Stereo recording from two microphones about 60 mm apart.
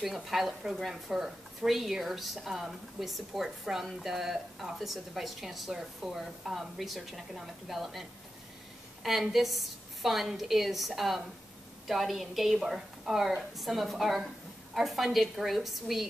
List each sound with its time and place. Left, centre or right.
0.0 s speech: centre